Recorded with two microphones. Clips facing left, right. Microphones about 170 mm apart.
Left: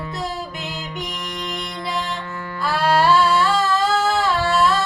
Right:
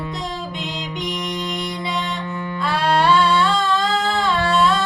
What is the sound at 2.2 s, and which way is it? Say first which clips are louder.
Music: right 4 dB; 20° right (ahead or behind).